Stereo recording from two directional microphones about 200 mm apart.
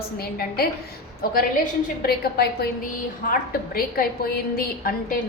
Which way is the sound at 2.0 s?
50° left (ahead or behind).